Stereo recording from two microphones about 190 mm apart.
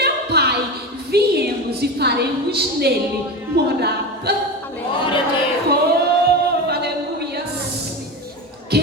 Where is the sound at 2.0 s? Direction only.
60° right (ahead or behind).